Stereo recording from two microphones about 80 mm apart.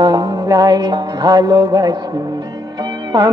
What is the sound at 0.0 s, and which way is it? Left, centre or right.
Music, right.